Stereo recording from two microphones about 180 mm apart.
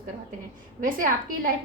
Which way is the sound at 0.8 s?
50° right (ahead or behind).